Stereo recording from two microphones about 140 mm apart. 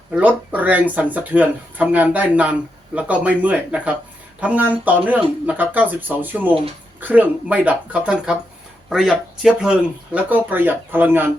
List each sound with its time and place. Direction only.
0.1 s speech: 10° right (ahead or behind)